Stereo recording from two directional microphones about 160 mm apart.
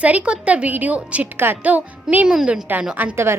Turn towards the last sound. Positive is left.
turn(degrees=-15)  # may be behind; listen again after turning